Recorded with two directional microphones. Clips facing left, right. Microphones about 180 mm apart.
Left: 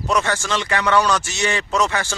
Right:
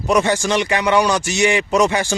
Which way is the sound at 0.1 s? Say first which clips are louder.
Right 5 dB; 15° right (ahead or behind).